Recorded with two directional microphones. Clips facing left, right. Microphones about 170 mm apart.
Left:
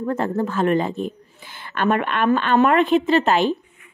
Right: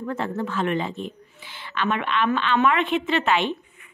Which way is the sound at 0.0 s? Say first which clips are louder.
Left 5 dB; 40° left (ahead or behind).